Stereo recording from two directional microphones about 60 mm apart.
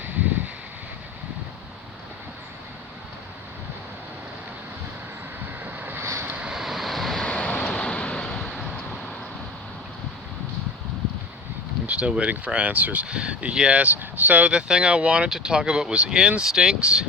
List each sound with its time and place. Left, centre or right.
0.0 s a sound: right
5.6 s boat: right
6.0 s vehicle: right
6.2 s vehicle: right
6.5 s vehicle: centre
7.3 s vehicle: centre
11.9 s speech: centre
14.5 s speech: centre